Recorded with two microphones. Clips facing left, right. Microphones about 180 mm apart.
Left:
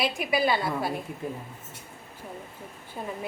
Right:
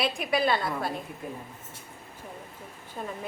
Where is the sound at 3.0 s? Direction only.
10° left (ahead or behind).